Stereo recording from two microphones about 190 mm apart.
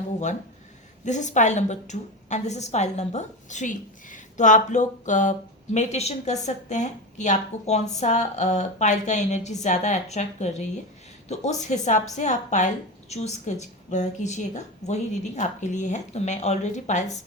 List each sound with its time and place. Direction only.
1.0 s a woman's voice: 40° left (ahead or behind)